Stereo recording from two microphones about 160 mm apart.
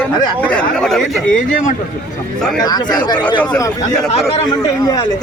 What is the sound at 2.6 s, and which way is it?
Speech, 25° left (ahead or behind).